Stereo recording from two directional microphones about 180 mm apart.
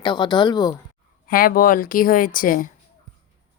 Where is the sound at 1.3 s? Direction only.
55° left (ahead or behind).